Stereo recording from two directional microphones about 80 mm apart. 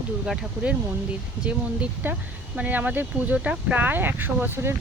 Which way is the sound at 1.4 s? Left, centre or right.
Centre.